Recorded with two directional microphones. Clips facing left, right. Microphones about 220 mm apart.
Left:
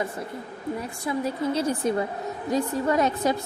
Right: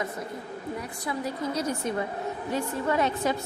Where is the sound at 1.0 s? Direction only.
25° left (ahead or behind).